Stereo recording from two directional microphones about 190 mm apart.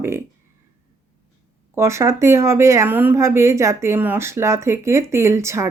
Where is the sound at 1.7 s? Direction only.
15° right (ahead or behind).